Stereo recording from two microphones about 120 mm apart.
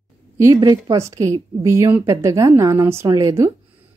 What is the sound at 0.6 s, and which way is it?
A woman's voice, 35° right (ahead or behind).